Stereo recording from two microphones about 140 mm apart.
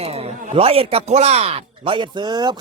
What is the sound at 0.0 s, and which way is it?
Speech, 45° right (ahead or behind).